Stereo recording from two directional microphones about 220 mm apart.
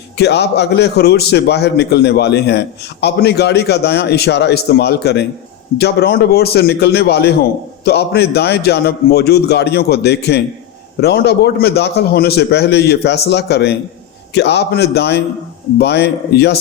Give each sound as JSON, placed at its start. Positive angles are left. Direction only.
{"t": 0.2, "sound": "a man's voice", "side_deg": 50}